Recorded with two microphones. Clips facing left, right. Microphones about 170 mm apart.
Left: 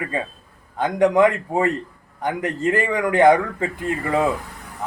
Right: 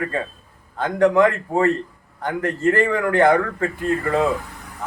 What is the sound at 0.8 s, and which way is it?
A man's voice, 15° left (ahead or behind).